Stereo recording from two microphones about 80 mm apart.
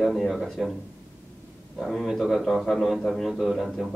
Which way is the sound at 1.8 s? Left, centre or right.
Centre.